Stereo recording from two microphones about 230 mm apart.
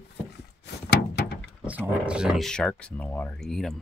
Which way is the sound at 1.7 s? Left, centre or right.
Centre.